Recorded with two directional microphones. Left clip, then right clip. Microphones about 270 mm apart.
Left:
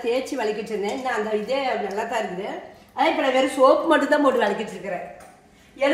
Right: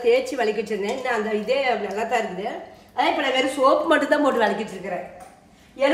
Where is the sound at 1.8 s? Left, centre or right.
Centre.